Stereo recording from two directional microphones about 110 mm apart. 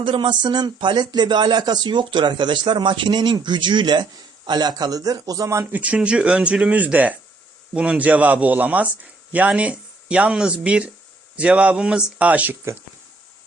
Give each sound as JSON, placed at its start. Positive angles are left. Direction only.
{"t": 0.0, "sound": "a man's voice", "side_deg": -50}
{"t": 5.7, "sound": "a man's voice", "side_deg": -10}